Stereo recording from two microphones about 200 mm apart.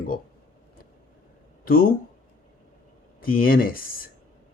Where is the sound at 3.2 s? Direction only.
45° left (ahead or behind).